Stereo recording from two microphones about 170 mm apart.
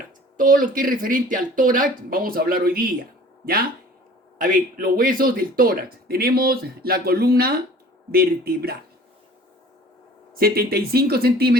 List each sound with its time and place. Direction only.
0.3 s speech: 55° right (ahead or behind)
10.3 s speech: 60° right (ahead or behind)